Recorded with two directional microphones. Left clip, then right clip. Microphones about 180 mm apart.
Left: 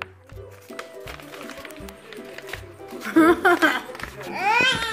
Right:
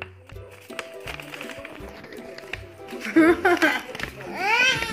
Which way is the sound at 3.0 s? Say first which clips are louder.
Left 1 dB; 5° right (ahead or behind).